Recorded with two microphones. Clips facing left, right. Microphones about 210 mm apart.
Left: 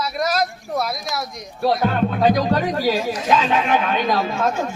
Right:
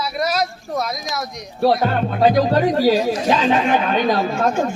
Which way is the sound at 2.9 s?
35° right (ahead or behind).